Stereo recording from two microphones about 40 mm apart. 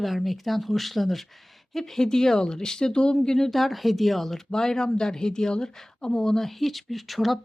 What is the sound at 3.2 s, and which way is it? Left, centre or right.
Speech, centre.